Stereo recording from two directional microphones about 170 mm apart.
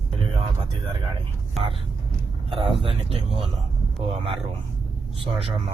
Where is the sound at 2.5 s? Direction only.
30° right (ahead or behind).